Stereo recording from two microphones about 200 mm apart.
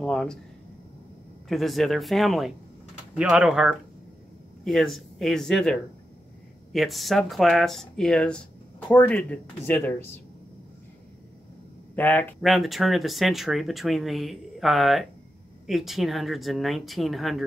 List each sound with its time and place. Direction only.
0.0 s speech: 5° left (ahead or behind)
1.5 s speech: centre (ahead or behind)
11.9 s speech: 10° left (ahead or behind)